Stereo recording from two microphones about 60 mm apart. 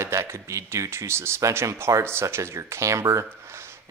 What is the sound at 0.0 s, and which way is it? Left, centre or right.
Speech, right.